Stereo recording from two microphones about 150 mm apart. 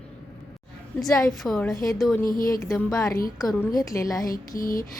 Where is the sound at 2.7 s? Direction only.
20° left (ahead or behind).